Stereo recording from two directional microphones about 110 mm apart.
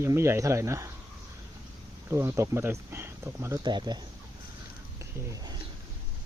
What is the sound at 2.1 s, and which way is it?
Speech, 25° right (ahead or behind).